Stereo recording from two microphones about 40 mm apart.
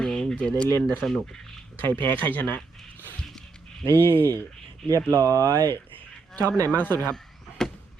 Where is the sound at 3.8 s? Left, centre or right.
Left.